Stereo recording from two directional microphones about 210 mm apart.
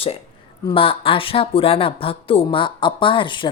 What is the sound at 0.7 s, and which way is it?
Speech, 25° left (ahead or behind).